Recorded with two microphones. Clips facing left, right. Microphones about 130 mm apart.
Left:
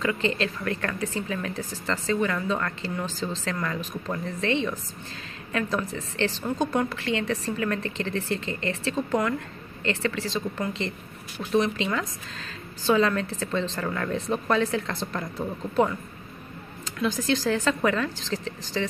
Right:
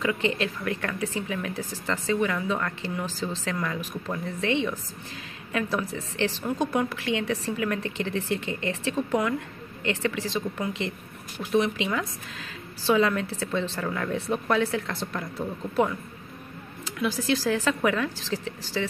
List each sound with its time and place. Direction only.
0.0 s a woman's voice: 10° right (ahead or behind)
16.8 s a sound: 10° right (ahead or behind)
17.3 s a woman's voice: 10° right (ahead or behind)